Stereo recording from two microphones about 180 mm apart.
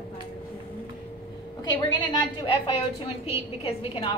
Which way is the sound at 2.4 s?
30° left (ahead or behind).